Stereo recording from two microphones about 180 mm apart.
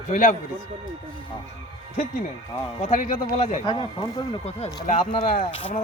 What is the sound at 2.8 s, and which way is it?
Speech, 45° left (ahead or behind).